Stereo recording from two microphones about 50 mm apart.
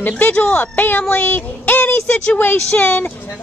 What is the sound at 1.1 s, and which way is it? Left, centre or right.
Child singing, left.